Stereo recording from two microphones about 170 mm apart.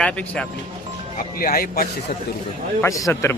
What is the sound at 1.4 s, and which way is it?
Speech, 60° left (ahead or behind).